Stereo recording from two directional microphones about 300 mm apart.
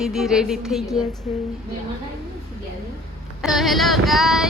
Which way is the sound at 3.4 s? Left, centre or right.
Centre.